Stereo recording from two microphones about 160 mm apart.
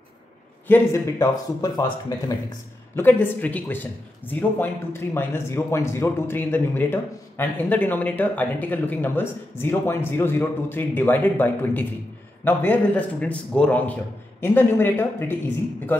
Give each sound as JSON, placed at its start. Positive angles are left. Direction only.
{"t": 0.7, "sound": "speech", "side_deg": 15}